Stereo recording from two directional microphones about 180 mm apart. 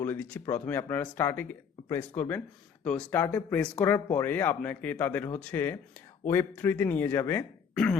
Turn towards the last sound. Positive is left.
turn(degrees=10)  # may be behind; listen again after turning